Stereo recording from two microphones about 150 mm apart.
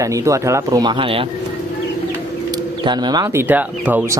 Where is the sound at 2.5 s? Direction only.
30° right (ahead or behind); by 4.1 s 10° right (ahead or behind).